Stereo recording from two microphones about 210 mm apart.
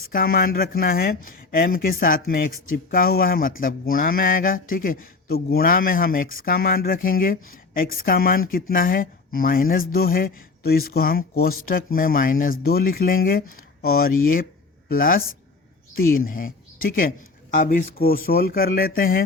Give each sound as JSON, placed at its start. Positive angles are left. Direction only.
{"t": 0.1, "sound": "a man's voice", "side_deg": 45}